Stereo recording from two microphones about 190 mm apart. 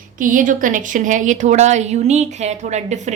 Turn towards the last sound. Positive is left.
turn(degrees=-40)  # may be behind; listen again after turning